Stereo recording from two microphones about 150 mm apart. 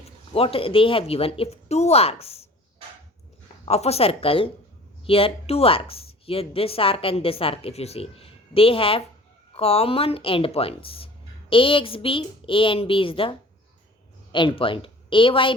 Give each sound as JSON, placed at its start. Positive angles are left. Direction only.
{"t": 0.3, "sound": "speech", "side_deg": 40}
{"t": 3.7, "sound": "speech", "side_deg": 45}
{"t": 14.3, "sound": "speech", "side_deg": 35}